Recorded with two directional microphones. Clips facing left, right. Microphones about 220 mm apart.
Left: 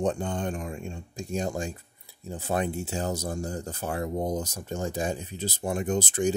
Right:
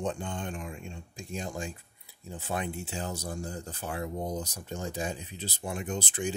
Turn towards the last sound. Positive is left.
turn(degrees=45)  # may be behind; listen again after turning